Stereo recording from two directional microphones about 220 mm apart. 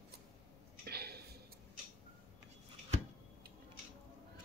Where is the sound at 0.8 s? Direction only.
45° right (ahead or behind).